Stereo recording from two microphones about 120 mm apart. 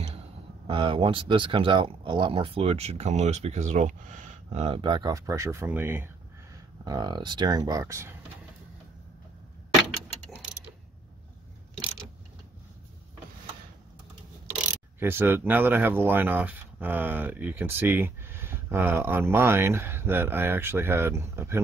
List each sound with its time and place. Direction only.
0.7 s speech: 45° right (ahead or behind); by 4.7 s 65° right (ahead or behind)
4.8 s speech: 40° right (ahead or behind)
5.1 s speech: 25° right (ahead or behind)
6.8 s speech: 35° right (ahead or behind)
15.0 s speech: 20° right (ahead or behind)